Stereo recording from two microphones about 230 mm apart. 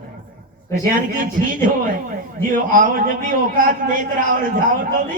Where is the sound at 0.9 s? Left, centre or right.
Right.